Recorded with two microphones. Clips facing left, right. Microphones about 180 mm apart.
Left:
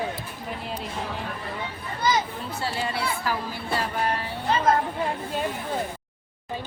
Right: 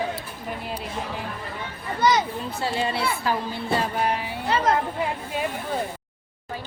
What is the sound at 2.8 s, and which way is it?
A woman's voice, 25° right (ahead or behind).